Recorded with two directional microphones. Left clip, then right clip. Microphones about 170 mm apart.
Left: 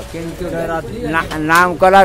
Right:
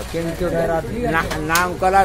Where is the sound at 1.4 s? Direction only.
55° left (ahead or behind).